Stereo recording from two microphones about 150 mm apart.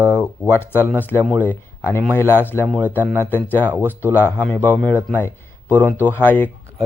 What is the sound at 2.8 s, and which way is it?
Speech, 10° right (ahead or behind).